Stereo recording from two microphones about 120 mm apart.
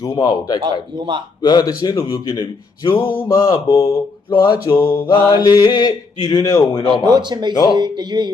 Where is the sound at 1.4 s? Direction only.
35° left (ahead or behind).